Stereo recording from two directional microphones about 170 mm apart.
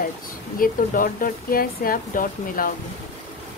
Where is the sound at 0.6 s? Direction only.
55° left (ahead or behind).